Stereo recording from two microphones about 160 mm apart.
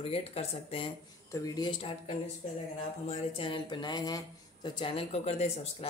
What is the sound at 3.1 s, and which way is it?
Speech, 35° left (ahead or behind).